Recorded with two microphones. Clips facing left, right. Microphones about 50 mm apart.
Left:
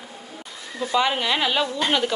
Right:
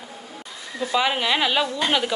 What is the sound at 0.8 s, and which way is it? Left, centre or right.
Speech, centre.